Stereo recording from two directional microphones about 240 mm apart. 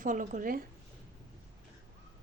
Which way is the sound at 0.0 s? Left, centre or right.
Right.